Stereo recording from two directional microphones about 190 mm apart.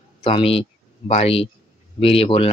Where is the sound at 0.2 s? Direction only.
30° left (ahead or behind).